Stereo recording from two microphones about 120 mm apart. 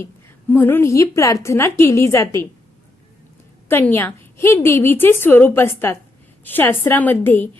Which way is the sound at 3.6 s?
20° left (ahead or behind).